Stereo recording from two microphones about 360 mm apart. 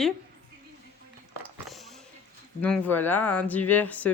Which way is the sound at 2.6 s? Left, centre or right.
Centre.